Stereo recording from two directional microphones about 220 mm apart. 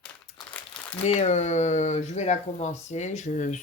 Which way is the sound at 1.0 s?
30° left (ahead or behind).